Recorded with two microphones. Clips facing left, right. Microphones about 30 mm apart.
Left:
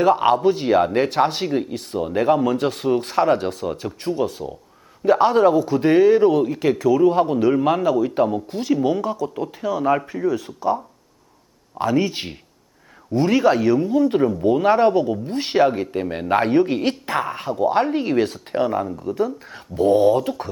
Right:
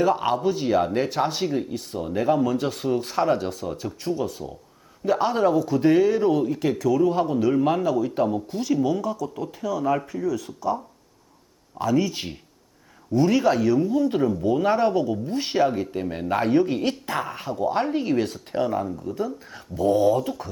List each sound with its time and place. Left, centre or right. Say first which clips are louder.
0.0 s speech: left 5 dB; left
0.4 s speech: left 5 dB; left
4.0 s speech: left 4 dB; left
11.8 s speech: left 3 dB; left
13.7 s speech: left 4 dB; left
14.4 s speech: left 6 dB; left
15.6 s speech: left 4 dB; left
18.7 s speech: left 3 dB; left
18.9 s speech: left 6 dB; left
19.5 s speech: left 4 dB; left